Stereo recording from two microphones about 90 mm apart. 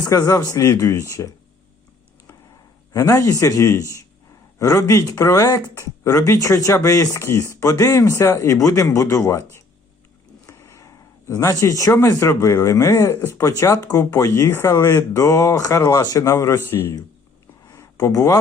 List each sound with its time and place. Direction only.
0.0 s speech: 40° left (ahead or behind)
2.9 s speech: 35° left (ahead or behind)
17.7 s a sound: 40° left (ahead or behind)